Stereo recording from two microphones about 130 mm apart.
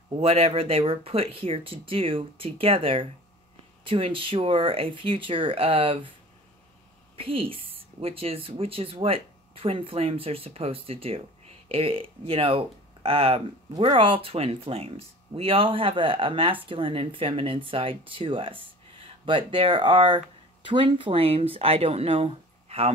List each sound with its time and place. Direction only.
0.1 s speech: 50° right (ahead or behind)
7.2 s speech: 45° right (ahead or behind)